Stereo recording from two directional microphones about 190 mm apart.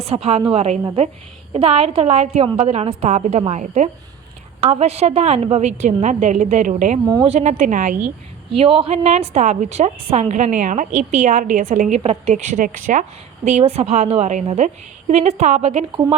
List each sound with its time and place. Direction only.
0.0 s a woman's voice: 30° right (ahead or behind)
8.5 s a woman's voice: 30° right (ahead or behind)